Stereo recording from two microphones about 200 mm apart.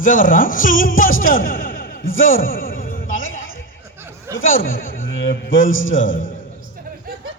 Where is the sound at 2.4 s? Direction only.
45° left (ahead or behind).